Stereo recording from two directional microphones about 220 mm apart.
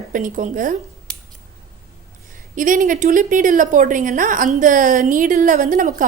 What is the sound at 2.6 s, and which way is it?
A woman's voice, 35° right (ahead or behind).